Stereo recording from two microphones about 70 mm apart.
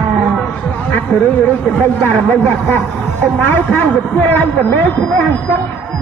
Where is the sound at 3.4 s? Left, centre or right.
Left.